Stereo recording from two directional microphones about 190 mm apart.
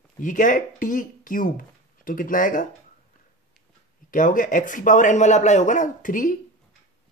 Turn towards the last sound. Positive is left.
turn(degrees=45)  # may be behind; listen again after turning